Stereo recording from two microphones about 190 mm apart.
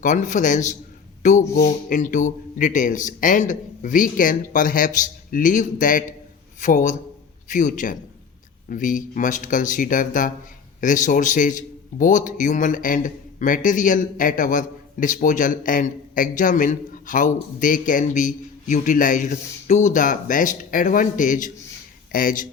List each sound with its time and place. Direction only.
0.0 s a man's voice: 40° left (ahead or behind)